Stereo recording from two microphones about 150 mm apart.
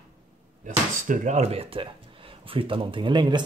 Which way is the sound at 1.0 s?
55° right (ahead or behind).